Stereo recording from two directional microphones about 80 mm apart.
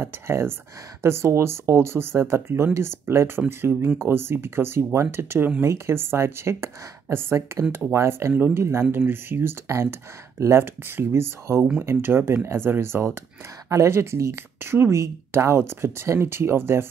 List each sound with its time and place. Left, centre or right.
0.0 s speech: right